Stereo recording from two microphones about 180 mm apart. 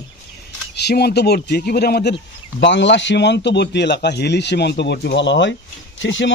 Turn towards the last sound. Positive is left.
turn(degrees=90)